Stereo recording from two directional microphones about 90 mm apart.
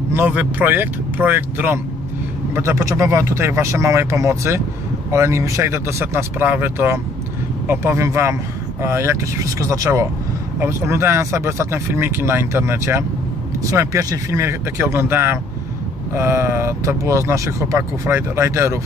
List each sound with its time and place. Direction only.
0.3 s speech: 20° right (ahead or behind)